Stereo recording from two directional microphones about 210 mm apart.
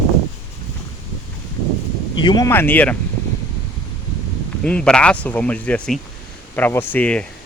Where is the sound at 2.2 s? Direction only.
20° left (ahead or behind).